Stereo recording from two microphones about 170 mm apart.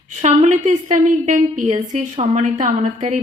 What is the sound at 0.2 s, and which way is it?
A woman's voice, 45° right (ahead or behind).